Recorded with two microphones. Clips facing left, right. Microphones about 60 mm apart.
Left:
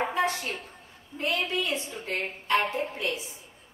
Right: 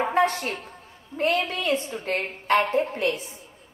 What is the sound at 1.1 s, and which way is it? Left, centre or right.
A woman's voice, right.